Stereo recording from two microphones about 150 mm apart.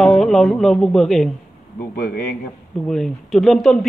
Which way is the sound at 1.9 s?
85° left.